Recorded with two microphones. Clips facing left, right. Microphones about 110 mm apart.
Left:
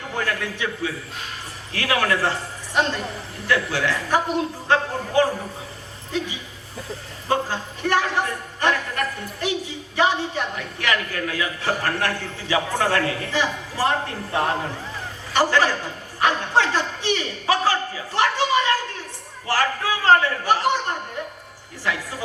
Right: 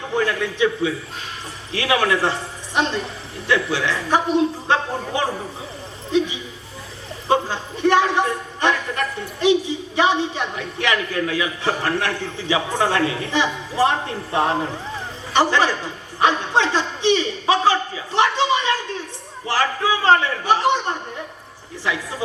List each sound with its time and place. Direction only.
0.1 s a man's voice: 20° right (ahead or behind)
15.3 s a woman's voice: 20° right (ahead or behind)